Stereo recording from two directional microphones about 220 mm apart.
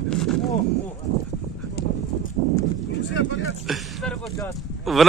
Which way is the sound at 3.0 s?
55° left (ahead or behind).